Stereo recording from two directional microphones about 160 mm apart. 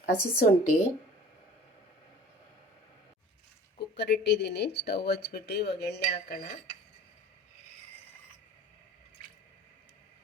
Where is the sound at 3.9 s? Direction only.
90° left.